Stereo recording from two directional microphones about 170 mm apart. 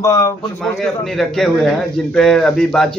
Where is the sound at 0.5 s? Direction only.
5° left (ahead or behind).